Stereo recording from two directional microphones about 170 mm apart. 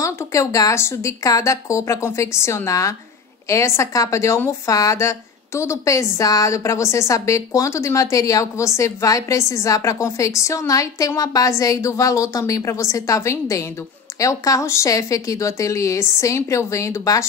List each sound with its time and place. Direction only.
0.0 s a woman's voice: 20° left (ahead or behind)